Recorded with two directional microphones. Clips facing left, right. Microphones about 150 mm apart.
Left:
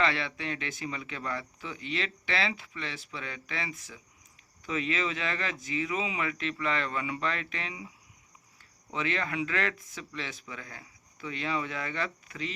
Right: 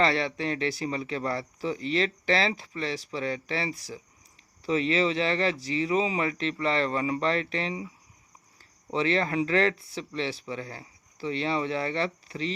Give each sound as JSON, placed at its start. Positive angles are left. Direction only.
{"t": 0.0, "sound": "speech", "side_deg": -35}
{"t": 8.9, "sound": "speech", "side_deg": -35}